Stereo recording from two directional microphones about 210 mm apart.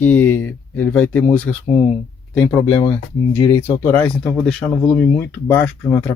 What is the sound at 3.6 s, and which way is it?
Speech, 10° left (ahead or behind).